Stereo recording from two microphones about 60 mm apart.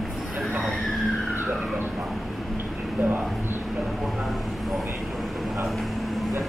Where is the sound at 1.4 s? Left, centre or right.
Right.